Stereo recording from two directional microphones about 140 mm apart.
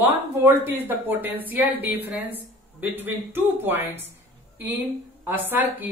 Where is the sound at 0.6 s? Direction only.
15° right (ahead or behind).